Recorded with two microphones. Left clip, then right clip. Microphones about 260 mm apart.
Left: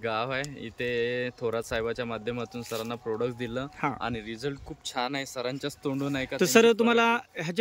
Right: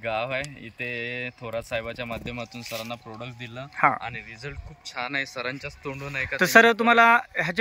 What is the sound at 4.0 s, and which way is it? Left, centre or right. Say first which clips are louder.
Speech: left 1 dB; left.